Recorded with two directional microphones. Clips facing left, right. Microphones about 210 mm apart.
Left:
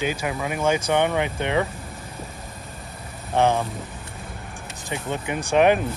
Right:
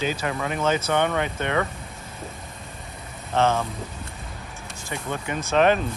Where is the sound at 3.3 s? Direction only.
15° left (ahead or behind).